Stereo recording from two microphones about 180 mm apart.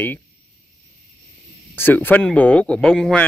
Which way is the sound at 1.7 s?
10° left (ahead or behind).